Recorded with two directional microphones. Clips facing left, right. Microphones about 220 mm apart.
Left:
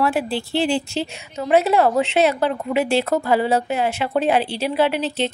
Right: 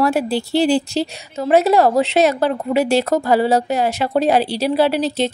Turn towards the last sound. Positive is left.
turn(degrees=-40)  # may be behind; listen again after turning